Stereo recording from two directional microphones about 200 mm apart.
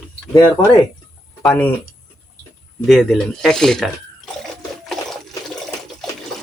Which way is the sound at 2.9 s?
Centre (ahead or behind).